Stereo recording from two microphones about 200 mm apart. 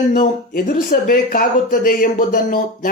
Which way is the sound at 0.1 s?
45° left (ahead or behind).